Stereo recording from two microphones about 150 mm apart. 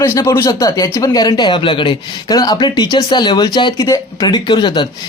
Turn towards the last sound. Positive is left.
turn(degrees=30)  # may be behind; listen again after turning